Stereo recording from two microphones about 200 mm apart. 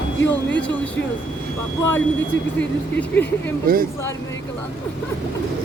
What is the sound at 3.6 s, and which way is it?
Speech, 45° right (ahead or behind).